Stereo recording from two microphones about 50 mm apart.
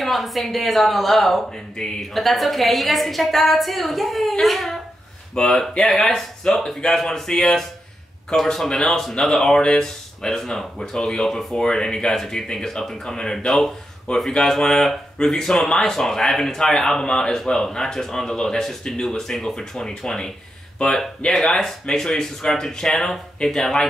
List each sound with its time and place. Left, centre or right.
0.0 s a woman's voice: centre
21.3 s speech: centre